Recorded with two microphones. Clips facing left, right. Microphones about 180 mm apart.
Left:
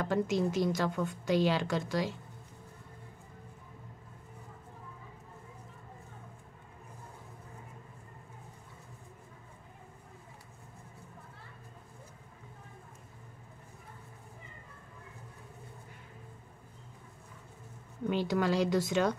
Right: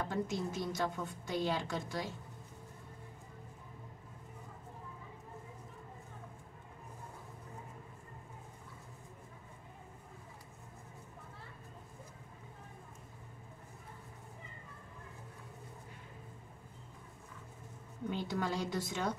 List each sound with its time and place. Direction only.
0.0 s a woman's voice: 85° left
18.1 s speech: 90° left